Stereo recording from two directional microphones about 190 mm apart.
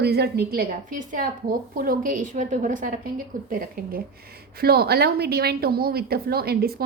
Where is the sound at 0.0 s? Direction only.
60° right (ahead or behind).